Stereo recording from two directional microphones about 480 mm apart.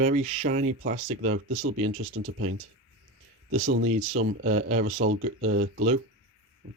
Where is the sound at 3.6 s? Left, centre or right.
Right.